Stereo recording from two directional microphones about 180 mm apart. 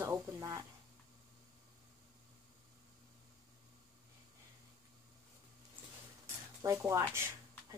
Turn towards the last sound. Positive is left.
turn(degrees=-15)  # may be behind; listen again after turning